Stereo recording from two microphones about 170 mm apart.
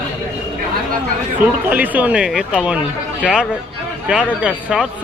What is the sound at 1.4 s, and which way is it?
Speech, 10° right (ahead or behind).